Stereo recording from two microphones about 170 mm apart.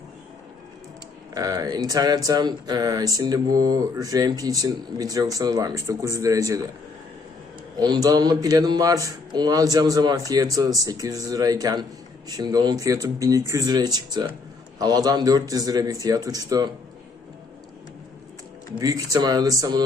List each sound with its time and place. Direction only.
1.3 s speech: 20° right (ahead or behind)
7.8 s speech: 25° right (ahead or behind)
18.8 s speech: 20° right (ahead or behind)